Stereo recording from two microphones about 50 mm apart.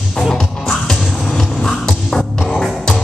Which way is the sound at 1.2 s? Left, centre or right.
Centre.